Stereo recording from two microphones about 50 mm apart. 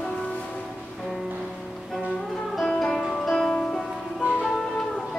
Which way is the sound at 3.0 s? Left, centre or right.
Centre.